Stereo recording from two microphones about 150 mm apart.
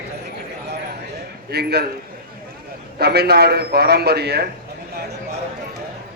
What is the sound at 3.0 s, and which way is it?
A man's voice, 90° right.